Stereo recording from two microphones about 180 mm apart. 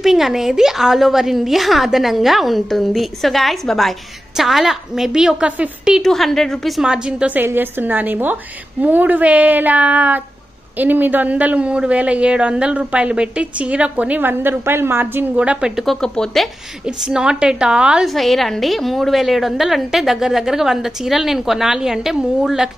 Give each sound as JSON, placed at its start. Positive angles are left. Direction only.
{"t": 0.0, "sound": "speech", "side_deg": 0}